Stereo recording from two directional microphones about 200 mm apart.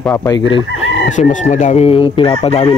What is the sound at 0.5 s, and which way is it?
Speech, 35° left (ahead or behind).